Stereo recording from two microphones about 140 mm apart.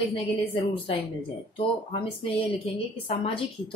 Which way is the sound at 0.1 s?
40° left (ahead or behind).